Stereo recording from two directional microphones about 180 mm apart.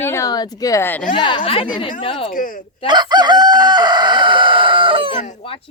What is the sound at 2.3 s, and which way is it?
Speech, 50° left (ahead or behind).